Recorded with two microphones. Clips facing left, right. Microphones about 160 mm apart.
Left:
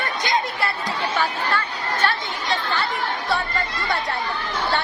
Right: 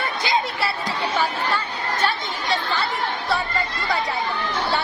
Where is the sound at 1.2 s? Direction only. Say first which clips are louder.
Even; 10° right (ahead or behind).